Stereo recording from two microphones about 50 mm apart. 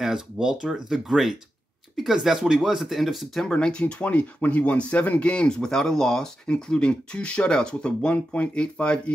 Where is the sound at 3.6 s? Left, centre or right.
Centre.